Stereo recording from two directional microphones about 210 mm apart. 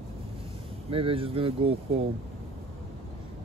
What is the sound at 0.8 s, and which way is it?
Speech, 25° right (ahead or behind).